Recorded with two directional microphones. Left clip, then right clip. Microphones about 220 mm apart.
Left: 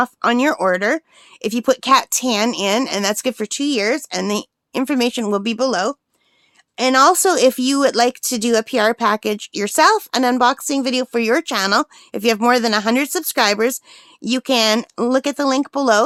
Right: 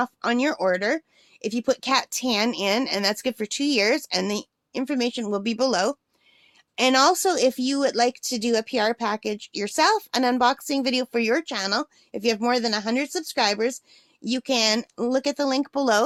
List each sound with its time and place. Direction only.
0.0 s speech: 25° left (ahead or behind)